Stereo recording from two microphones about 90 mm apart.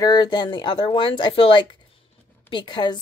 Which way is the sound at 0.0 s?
50° left (ahead or behind).